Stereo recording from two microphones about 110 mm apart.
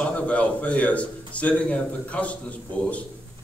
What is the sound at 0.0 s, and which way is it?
A man's voice, 10° left (ahead or behind).